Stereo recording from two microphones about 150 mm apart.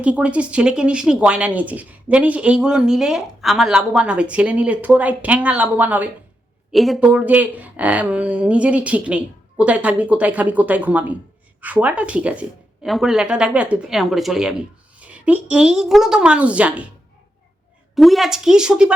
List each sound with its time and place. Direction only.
0.0 s speech: 10° right (ahead or behind)
6.7 s a woman's voice: centre (ahead or behind)
17.9 s a woman's voice: centre (ahead or behind)